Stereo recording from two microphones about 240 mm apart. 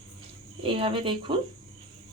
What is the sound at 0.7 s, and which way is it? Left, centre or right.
Speech, right.